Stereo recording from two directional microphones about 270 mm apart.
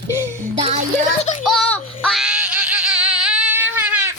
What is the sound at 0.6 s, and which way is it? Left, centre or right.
Speech, right.